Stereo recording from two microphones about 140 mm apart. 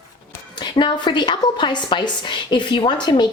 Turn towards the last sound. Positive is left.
turn(degrees=30)  # may be behind; listen again after turning